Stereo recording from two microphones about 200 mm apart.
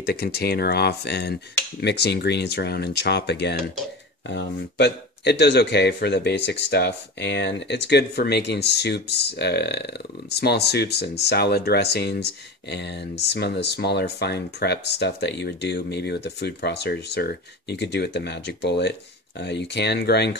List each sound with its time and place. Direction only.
0.0 s speech: 50° left (ahead or behind)